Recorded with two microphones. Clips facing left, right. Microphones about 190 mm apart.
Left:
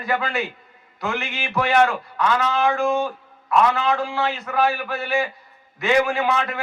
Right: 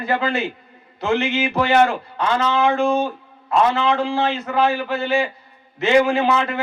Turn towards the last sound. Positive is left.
turn(degrees=-25)  # may be behind; listen again after turning